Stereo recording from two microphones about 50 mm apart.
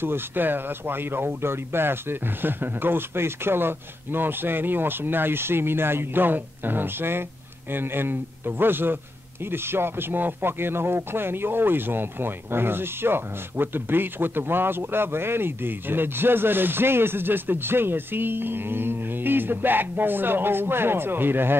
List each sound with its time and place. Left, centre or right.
0.0 s a man's voice: right